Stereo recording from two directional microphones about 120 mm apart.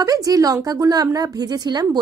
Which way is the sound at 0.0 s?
30° right (ahead or behind).